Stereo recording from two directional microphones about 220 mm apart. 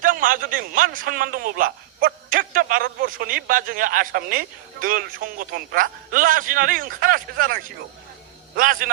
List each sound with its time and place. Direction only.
0.0 s a man's voice: 40° right (ahead or behind)